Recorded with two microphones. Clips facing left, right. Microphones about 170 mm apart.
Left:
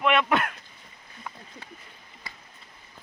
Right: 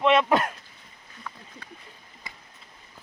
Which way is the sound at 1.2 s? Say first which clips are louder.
Even; 20° left (ahead or behind).